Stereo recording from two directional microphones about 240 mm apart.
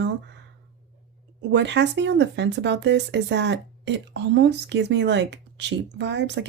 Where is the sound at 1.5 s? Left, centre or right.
Right.